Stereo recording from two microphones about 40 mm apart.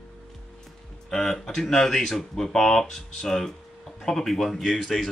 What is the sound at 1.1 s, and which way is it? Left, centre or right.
Speech, centre.